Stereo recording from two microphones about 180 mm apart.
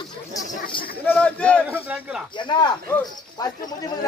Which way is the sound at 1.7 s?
10° right (ahead or behind).